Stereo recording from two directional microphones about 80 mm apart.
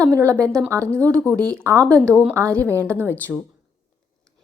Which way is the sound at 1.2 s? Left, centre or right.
Centre.